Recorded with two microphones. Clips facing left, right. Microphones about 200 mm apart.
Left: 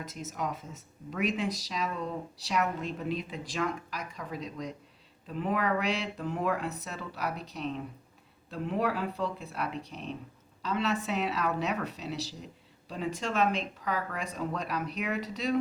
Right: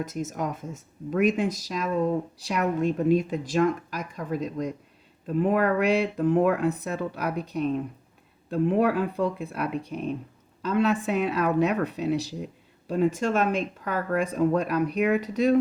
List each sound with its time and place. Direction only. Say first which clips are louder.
0.0 s speech: right 7 dB; 50° right (ahead or behind)